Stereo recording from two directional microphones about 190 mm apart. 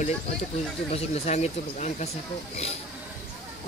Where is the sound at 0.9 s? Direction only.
35° left (ahead or behind).